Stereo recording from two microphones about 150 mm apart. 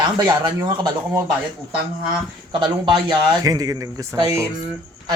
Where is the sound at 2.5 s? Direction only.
30° right (ahead or behind).